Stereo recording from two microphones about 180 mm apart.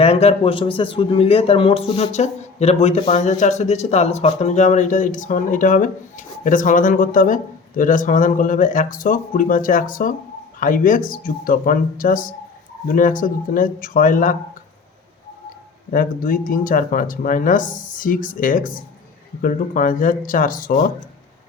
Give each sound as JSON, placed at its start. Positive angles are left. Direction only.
{"t": 0.0, "sound": "a man's voice", "side_deg": 35}
{"t": 15.9, "sound": "a man's voice", "side_deg": 50}